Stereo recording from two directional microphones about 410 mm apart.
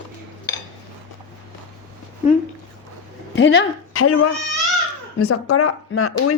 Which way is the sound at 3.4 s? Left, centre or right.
Left.